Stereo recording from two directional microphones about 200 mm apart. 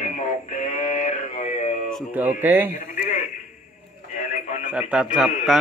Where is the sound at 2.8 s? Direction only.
45° left (ahead or behind).